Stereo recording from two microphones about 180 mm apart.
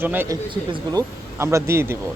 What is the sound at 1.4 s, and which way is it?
Speech, 15° right (ahead or behind).